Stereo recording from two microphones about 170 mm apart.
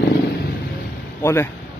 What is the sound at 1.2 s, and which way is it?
Speech, 15° left (ahead or behind).